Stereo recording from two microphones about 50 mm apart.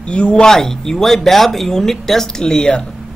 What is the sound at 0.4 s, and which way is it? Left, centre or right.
A woman's voice, centre.